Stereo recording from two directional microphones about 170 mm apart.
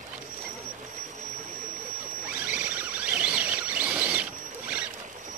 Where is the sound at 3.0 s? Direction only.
5° right (ahead or behind).